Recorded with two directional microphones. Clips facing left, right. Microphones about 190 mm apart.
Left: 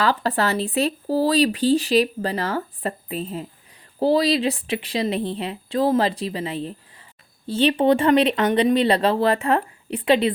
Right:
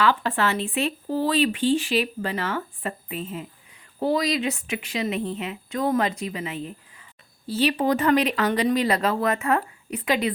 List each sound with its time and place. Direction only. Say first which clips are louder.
0.0 s speech: left 1 dB; 35° left (ahead or behind)